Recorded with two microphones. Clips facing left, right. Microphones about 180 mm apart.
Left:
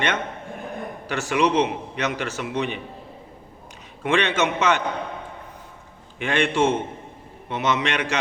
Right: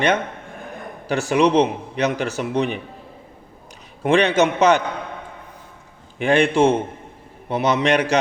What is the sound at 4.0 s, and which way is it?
Speech, 35° right (ahead or behind).